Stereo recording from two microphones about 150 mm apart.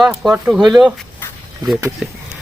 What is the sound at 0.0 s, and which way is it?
Speech, 5° right (ahead or behind).